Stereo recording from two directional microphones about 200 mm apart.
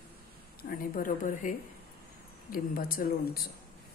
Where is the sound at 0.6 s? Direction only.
45° left (ahead or behind).